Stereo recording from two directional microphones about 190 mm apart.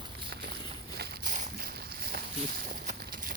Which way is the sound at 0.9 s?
55° right (ahead or behind).